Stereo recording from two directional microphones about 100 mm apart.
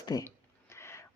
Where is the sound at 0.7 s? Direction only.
25° left (ahead or behind).